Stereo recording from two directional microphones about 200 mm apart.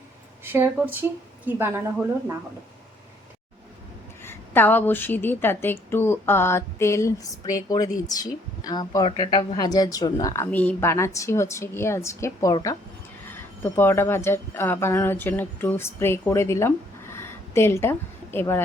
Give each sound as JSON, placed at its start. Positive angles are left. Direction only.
{"t": 0.4, "sound": "a woman's voice", "side_deg": -10}
{"t": 4.2, "sound": "a woman's voice", "side_deg": 10}